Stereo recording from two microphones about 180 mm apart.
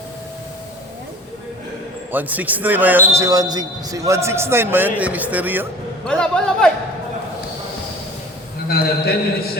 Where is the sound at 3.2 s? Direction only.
20° right (ahead or behind).